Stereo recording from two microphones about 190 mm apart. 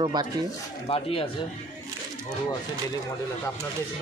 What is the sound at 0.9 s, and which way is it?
Speech, 30° left (ahead or behind).